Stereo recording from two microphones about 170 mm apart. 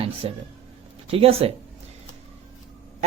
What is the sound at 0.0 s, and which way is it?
Speech, 35° right (ahead or behind).